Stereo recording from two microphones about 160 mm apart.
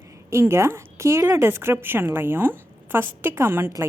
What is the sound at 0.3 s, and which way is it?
A woman's voice, 15° right (ahead or behind).